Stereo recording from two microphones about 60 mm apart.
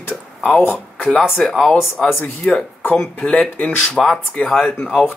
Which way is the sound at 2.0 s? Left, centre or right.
Left.